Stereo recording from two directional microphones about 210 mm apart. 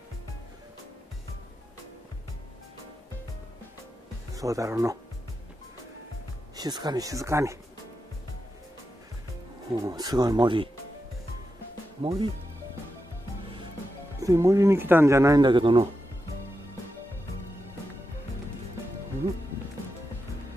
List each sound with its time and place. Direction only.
4.4 s speech: 15° right (ahead or behind)
6.5 s speech: 20° right (ahead or behind)
9.7 s speech: 15° right (ahead or behind)
12.0 s speech: 25° right (ahead or behind)
14.2 s speech: 15° right (ahead or behind)